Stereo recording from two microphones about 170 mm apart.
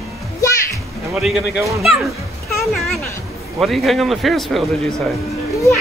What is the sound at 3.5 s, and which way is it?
A man's voice, centre (ahead or behind).